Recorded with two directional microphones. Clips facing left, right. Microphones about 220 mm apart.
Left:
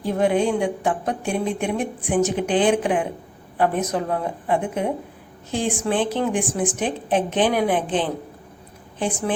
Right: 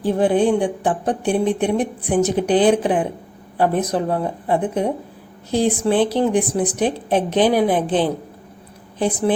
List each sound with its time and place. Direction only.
0.0 s a woman's voice: 30° right (ahead or behind)